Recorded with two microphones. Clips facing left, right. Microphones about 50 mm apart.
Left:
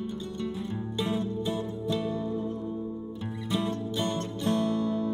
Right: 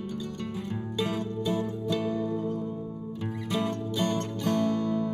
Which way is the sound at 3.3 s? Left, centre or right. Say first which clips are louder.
Right 1 dB; right.